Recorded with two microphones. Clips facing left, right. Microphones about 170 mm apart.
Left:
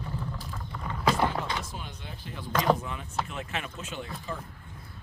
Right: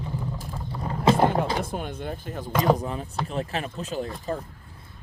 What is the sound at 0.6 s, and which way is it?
Vehicle, 35° right (ahead or behind).